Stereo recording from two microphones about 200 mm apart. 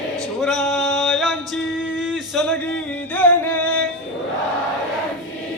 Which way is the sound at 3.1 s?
10° left (ahead or behind).